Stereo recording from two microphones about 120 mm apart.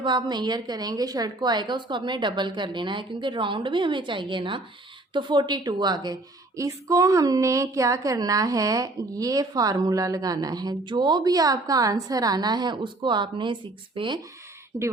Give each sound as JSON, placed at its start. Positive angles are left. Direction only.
{"t": 0.0, "sound": "a woman's voice", "side_deg": -40}